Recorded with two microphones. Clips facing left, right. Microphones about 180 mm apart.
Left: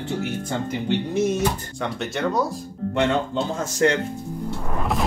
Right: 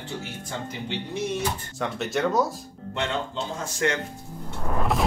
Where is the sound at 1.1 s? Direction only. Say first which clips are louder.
Left 6 dB; 45° left (ahead or behind).